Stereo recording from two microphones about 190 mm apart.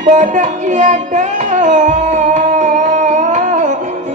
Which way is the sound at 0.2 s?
40° right (ahead or behind).